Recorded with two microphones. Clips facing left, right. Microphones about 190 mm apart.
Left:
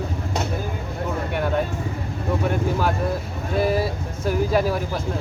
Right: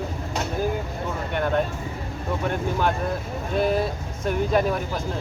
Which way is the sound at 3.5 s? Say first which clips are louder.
Left 1 dB; 5° left (ahead or behind).